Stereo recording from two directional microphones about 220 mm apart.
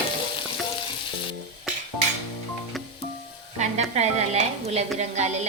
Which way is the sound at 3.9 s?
30° right (ahead or behind).